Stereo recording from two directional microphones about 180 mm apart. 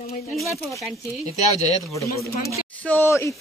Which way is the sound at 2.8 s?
10° left (ahead or behind).